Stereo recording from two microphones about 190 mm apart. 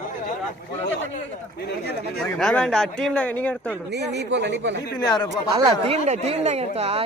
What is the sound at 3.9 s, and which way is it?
Speech, 65° right (ahead or behind).